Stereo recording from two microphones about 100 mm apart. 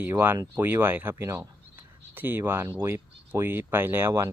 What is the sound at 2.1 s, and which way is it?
Speech, 20° right (ahead or behind).